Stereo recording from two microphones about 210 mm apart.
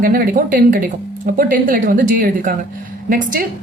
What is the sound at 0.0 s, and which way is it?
A woman's voice, 45° right (ahead or behind).